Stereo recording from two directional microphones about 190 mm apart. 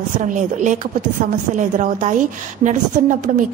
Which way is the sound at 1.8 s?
40° right (ahead or behind).